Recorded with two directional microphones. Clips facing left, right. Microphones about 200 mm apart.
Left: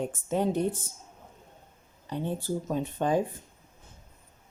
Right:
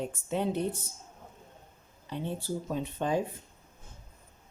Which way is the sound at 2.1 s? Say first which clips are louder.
Left 3 dB; 45° left (ahead or behind).